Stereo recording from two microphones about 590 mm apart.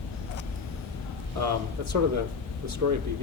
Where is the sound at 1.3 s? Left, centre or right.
Right.